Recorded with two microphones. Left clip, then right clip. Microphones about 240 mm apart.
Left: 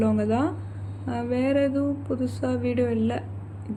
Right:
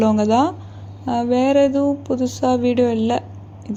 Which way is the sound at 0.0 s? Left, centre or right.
Right.